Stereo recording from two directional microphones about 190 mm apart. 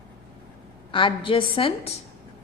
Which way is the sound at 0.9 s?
25° left (ahead or behind).